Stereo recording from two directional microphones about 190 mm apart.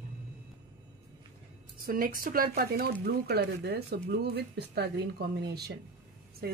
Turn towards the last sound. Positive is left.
turn(degrees=-55)  # may be behind; listen again after turning